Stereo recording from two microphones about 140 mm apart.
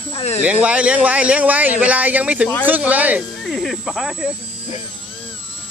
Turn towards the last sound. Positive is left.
turn(degrees=0)  # may be behind; listen again after turning